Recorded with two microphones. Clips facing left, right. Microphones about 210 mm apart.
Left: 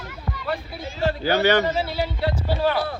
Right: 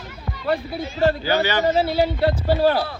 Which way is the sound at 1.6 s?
40° right (ahead or behind).